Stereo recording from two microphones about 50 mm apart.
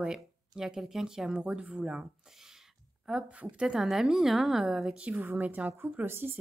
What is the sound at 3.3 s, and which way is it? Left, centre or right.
Speech, right.